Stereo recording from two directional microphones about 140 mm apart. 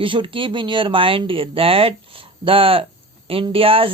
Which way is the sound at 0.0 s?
40° right (ahead or behind).